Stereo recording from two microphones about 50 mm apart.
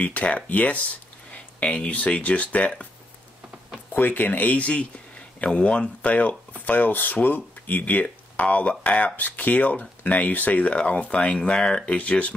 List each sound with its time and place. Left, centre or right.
0.0 s speech: left
3.9 s speech: left